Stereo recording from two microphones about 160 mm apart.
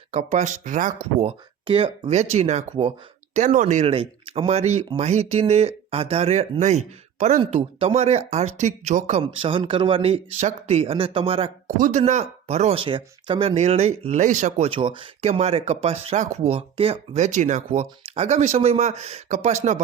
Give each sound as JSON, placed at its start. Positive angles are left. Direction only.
{"t": 0.1, "sound": "speech", "side_deg": -45}